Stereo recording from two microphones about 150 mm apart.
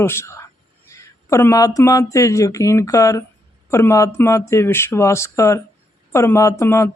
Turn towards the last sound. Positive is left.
turn(degrees=20)  # may be behind; listen again after turning